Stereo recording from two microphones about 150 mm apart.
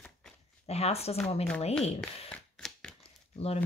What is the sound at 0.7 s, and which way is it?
Speech, 45° left (ahead or behind).